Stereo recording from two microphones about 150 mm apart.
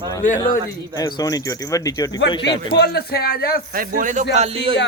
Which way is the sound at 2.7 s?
90° left.